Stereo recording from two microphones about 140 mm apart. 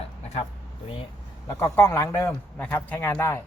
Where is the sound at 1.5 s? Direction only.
20° left (ahead or behind).